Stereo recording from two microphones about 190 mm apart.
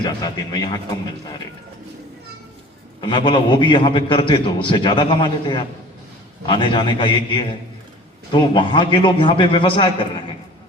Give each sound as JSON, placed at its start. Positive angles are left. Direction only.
{"t": 0.0, "sound": "a man's voice", "side_deg": 20}
{"t": 3.0, "sound": "a man's voice", "side_deg": 25}